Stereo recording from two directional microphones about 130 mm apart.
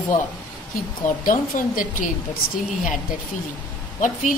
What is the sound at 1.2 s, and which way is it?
Speech, 90° left.